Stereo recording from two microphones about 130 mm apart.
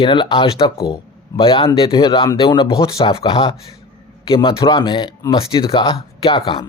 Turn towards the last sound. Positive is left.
turn(degrees=45)  # may be behind; listen again after turning